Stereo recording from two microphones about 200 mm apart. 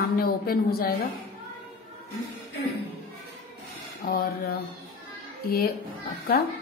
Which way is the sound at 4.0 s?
50° left (ahead or behind).